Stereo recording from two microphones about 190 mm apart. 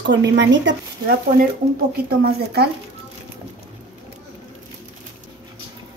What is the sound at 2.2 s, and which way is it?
Speech, 55° right (ahead or behind).